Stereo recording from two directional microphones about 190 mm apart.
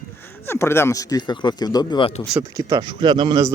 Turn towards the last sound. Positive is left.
turn(degrees=-20)  # may be behind; listen again after turning